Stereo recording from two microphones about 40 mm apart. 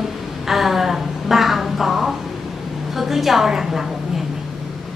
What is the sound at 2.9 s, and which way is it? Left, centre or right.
A woman's voice, centre.